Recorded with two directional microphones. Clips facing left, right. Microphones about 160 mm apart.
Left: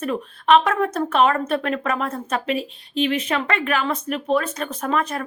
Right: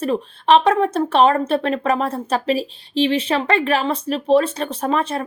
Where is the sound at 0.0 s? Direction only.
30° right (ahead or behind).